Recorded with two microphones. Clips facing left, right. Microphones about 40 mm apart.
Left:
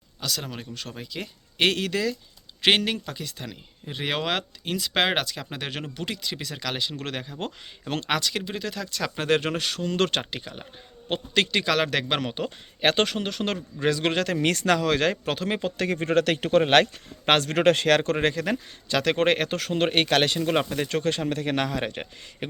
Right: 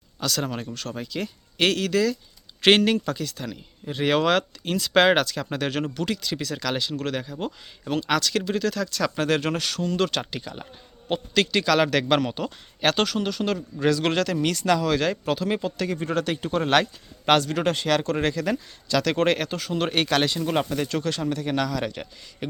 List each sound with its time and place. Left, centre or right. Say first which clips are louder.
0.2 s speech: right 5 dB; centre
0.7 s speech: right 4 dB; centre
7.3 s speech: right 2 dB; left
8.1 s speech: right 3 dB; centre
9.9 s speech: left 1 dB; left
13.7 s speech: right 2 dB; left
14.3 s speech: even; left
16.6 s speech: left 3 dB; left
19.7 s speech: left 1 dB; left